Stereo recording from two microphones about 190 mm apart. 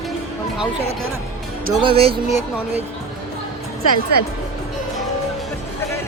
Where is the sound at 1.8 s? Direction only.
30° right (ahead or behind).